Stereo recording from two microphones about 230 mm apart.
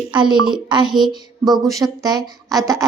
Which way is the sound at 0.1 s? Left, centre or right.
Centre.